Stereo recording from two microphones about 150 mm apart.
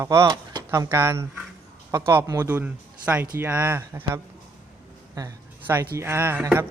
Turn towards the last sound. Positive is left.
turn(degrees=-15)  # may be behind; listen again after turning